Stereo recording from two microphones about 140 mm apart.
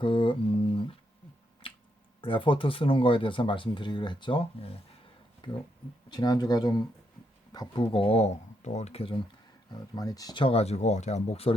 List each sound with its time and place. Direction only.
0.0 s mantra: 35° left (ahead or behind)
1.6 s finger snapping: 40° left (ahead or behind)
2.2 s speech: 35° left (ahead or behind)
9.7 s speech: 30° left (ahead or behind); by 11.5 s 45° left (ahead or behind)